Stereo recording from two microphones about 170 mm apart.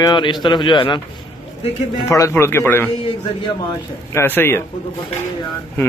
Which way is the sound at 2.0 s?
20° left (ahead or behind).